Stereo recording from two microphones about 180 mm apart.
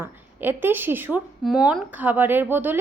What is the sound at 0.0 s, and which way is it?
A woman's voice, 10° right (ahead or behind).